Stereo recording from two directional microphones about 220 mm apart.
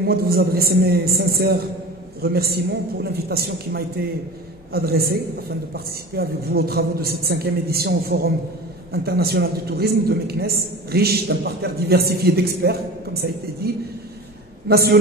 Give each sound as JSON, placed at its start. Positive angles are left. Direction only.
{"t": 0.0, "sound": "a woman's voice", "side_deg": -45}
{"t": 14.7, "sound": "a woman's voice", "side_deg": -45}